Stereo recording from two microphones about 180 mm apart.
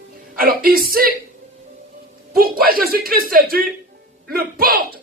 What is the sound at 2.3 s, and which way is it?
Speech, 55° right (ahead or behind).